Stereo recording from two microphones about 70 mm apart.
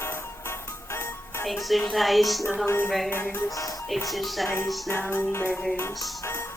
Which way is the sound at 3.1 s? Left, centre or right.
Left.